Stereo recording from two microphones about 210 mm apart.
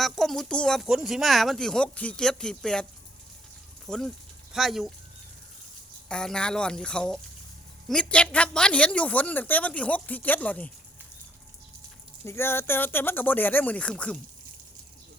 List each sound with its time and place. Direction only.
0.0 s speech: centre (ahead or behind)
3.8 s speech: centre (ahead or behind)
6.1 s a woman's voice: 5° left (ahead or behind)
12.2 s a woman's voice: 10° left (ahead or behind)